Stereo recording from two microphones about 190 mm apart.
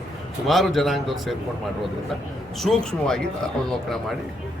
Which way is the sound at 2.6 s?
5° left (ahead or behind).